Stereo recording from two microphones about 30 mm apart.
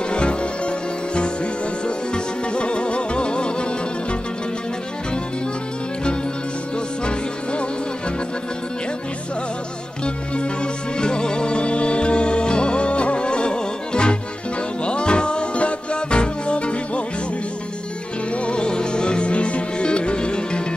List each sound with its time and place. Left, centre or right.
0.1 s music: left
10.0 s music: left
18.4 s music: left